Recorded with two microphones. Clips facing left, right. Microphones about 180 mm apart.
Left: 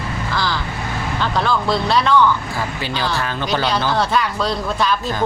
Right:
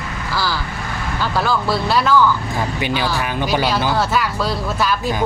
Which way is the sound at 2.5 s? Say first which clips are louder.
Right 3 dB; 15° right (ahead or behind).